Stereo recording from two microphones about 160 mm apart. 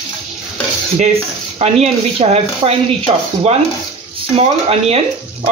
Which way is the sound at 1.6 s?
40° right (ahead or behind).